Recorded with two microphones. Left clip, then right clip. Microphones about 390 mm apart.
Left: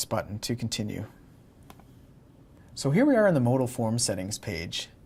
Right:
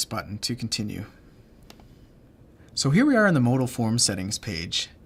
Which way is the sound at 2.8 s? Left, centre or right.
Centre.